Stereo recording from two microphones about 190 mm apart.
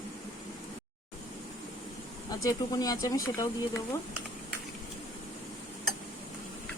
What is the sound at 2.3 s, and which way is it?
Speech, 20° left (ahead or behind).